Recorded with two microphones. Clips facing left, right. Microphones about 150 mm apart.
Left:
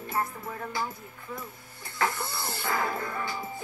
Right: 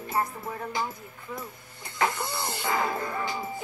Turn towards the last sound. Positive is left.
turn(degrees=-20)  # may be behind; listen again after turning